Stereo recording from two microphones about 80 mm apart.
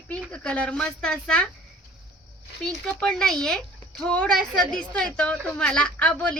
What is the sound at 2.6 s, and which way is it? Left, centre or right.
Speech, centre.